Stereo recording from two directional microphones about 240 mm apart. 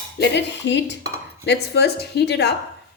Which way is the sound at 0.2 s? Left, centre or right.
Left.